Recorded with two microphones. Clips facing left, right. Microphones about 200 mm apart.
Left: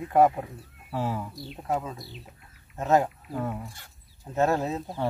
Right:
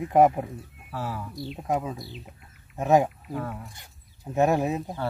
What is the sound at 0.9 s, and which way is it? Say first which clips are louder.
Speech: left 3 dB; 20° left (ahead or behind).